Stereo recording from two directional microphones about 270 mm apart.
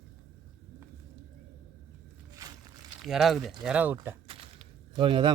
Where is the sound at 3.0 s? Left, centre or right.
Centre.